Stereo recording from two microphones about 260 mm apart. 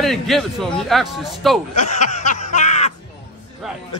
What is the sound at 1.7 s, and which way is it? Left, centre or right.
Snicker, left.